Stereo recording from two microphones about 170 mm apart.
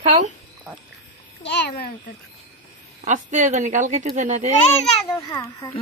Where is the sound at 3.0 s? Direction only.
45° right (ahead or behind).